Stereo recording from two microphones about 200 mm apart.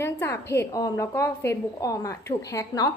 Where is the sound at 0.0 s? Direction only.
15° left (ahead or behind).